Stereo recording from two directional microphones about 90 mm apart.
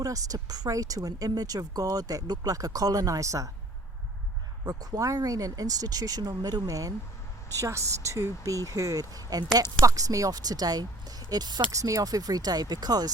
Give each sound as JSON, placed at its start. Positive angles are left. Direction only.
{"t": 0.0, "sound": "speech", "side_deg": -40}
{"t": 4.6, "sound": "speech", "side_deg": -45}
{"t": 11.7, "sound": "speech", "side_deg": -40}